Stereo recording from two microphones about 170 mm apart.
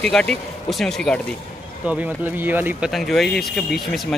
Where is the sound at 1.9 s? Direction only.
10° right (ahead or behind).